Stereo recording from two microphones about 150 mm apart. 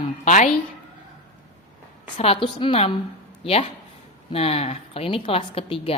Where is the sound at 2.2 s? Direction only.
40° left (ahead or behind).